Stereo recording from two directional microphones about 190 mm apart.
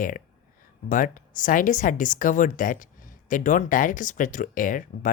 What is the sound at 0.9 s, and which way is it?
Speech, 45° left (ahead or behind).